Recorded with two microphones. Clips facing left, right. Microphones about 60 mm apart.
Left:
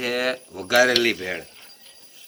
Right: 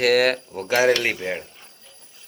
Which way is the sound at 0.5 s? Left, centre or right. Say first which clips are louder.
Left 3 dB; right.